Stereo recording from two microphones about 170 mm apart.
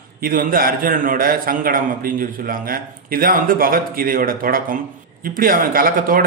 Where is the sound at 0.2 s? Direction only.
55° right (ahead or behind).